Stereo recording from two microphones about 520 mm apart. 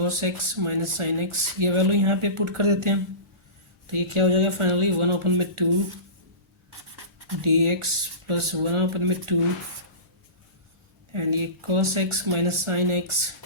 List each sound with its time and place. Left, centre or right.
0.0 s speech: right
6.7 s writing: right
7.4 s speech: right
11.1 s speech: right